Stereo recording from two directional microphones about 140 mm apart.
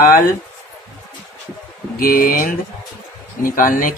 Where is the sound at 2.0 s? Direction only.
90° left.